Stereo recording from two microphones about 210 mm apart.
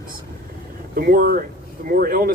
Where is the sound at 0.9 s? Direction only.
45° right (ahead or behind).